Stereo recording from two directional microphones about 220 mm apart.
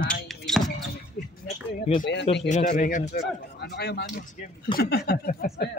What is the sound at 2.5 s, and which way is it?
A man's voice, 35° left (ahead or behind).